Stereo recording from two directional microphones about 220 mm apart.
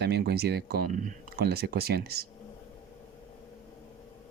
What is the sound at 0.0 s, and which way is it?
Speech, 45° right (ahead or behind).